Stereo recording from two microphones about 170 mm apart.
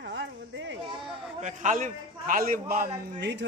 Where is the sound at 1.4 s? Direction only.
45° right (ahead or behind).